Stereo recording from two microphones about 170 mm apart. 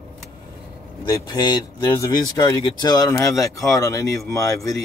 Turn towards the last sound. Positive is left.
turn(degrees=20)  # may be behind; listen again after turning